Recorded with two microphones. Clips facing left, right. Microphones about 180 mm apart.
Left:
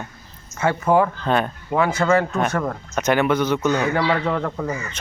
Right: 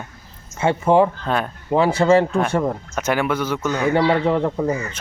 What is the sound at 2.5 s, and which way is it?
Speech, 20° right (ahead or behind).